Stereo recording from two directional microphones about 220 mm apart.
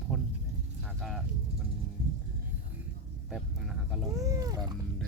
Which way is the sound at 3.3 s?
Centre (ahead or behind).